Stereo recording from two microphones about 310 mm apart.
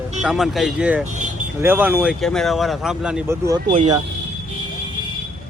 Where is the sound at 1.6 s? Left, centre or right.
Centre.